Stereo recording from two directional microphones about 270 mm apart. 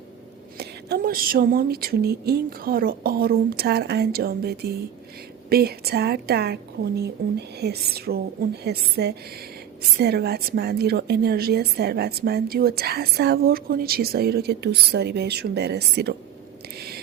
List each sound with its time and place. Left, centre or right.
0.5 s a woman's voice: right